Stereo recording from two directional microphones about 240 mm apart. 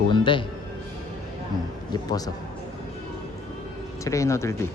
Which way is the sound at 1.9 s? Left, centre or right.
Centre.